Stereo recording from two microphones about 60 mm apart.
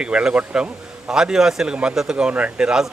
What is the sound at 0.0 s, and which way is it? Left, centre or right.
Speech, centre.